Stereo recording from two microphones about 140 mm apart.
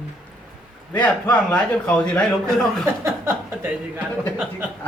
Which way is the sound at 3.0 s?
15° right (ahead or behind).